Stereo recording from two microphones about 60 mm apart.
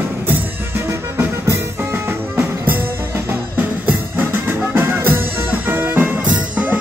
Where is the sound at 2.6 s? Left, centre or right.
Right.